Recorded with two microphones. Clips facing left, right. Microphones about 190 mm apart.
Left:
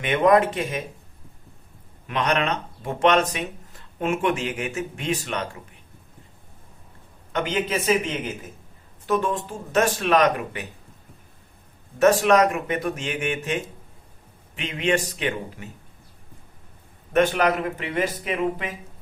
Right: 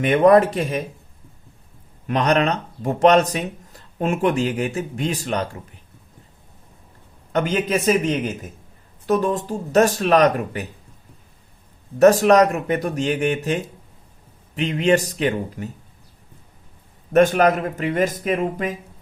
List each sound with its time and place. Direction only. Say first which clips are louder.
0.0 s speech: right 5 dB; 35° right (ahead or behind)
2.0 s speech: right 5 dB; 40° right (ahead or behind)
7.3 s a man's voice: right 4 dB; 40° right (ahead or behind)
11.9 s speech: right 4 dB; 40° right (ahead or behind)
17.1 s a man's voice: right 5 dB; 40° right (ahead or behind)